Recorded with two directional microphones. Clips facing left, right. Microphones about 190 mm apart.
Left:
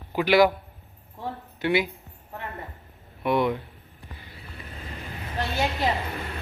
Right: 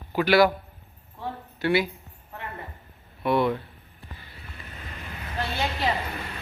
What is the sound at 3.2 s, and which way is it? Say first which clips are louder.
Speech: even; 15° left (ahead or behind).